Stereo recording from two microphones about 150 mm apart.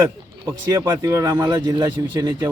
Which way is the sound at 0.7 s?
20° right (ahead or behind).